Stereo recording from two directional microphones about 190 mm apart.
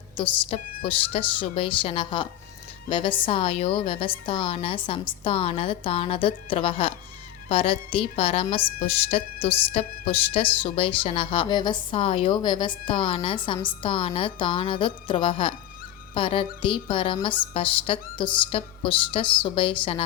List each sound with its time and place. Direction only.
0.2 s a woman's voice: 30° left (ahead or behind)